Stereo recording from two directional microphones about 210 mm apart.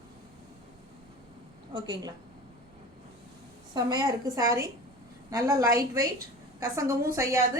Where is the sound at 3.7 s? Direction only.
20° right (ahead or behind).